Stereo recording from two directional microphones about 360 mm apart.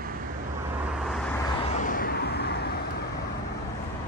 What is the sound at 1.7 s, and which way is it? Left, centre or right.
Vehicle, left.